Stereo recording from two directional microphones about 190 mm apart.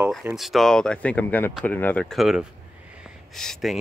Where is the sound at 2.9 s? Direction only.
Centre (ahead or behind).